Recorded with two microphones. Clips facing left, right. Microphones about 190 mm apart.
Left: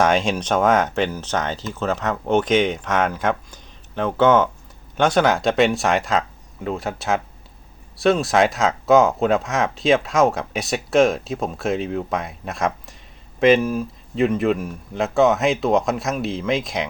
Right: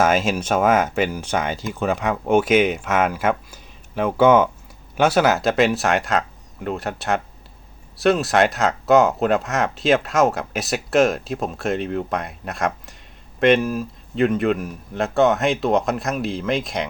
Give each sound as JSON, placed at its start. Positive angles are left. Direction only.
{"t": 0.0, "sound": "speech", "side_deg": -5}